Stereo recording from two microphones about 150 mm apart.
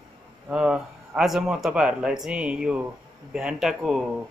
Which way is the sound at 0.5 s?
5° right (ahead or behind).